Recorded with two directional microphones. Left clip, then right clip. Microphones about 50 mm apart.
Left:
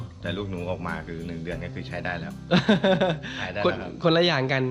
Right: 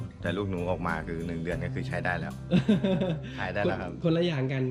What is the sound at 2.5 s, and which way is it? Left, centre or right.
Speech, right.